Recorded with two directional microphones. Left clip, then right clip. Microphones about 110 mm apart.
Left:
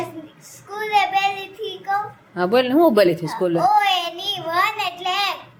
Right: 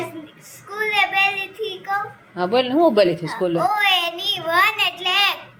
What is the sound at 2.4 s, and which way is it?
Speech, 25° left (ahead or behind).